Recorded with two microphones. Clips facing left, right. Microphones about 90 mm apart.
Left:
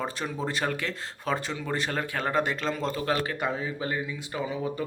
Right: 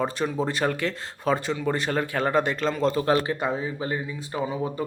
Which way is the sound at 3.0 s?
30° right (ahead or behind).